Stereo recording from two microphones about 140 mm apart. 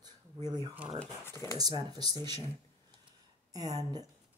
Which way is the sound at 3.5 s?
25° right (ahead or behind).